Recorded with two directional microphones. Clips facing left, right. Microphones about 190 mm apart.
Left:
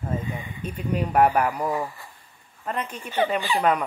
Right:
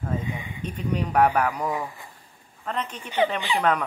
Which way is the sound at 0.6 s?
5° left (ahead or behind).